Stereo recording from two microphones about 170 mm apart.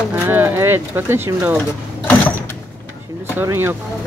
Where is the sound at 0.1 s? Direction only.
10° right (ahead or behind).